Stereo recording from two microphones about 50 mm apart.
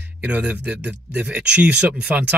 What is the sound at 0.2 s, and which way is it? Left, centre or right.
Speech, right.